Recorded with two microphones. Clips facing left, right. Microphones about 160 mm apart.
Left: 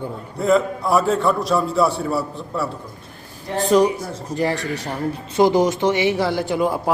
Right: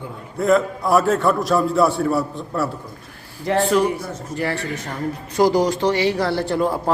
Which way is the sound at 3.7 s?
15° left (ahead or behind).